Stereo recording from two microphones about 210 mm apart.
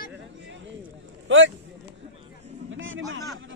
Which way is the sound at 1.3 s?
65° right (ahead or behind).